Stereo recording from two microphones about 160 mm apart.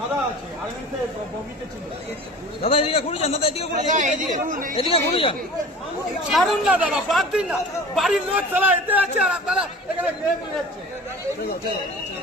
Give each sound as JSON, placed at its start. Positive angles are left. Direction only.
{"t": 2.6, "sound": "a man's voice", "side_deg": 35}
{"t": 3.8, "sound": "speech", "side_deg": -50}
{"t": 4.7, "sound": "a man's voice", "side_deg": 35}
{"t": 6.3, "sound": "speech", "side_deg": 0}